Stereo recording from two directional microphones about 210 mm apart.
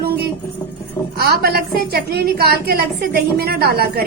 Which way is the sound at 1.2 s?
50° right (ahead or behind).